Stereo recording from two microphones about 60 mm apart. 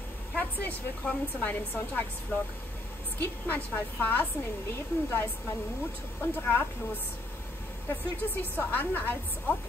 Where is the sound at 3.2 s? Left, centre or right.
Left.